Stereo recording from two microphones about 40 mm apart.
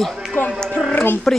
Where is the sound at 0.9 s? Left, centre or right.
Left.